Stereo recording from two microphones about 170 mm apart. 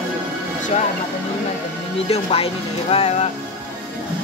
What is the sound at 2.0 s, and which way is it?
Speech, 35° left (ahead or behind).